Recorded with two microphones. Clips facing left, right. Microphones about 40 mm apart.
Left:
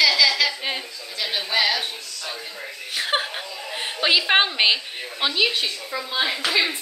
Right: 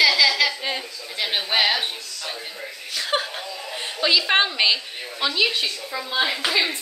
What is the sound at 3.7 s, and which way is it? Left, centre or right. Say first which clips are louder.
A woman's voice: left 1 dB; left.